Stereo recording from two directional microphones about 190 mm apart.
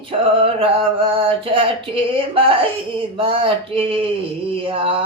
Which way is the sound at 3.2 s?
30° right (ahead or behind).